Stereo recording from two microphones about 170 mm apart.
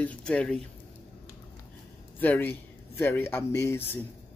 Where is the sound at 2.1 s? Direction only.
10° left (ahead or behind).